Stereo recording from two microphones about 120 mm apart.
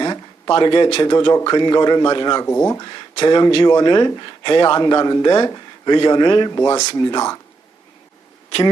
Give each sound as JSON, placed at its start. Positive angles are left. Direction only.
{"t": 0.0, "sound": "a sound", "side_deg": 35}
{"t": 1.0, "sound": "speech", "side_deg": 35}
{"t": 2.5, "sound": "speech", "side_deg": 20}
{"t": 6.5, "sound": "speech", "side_deg": 25}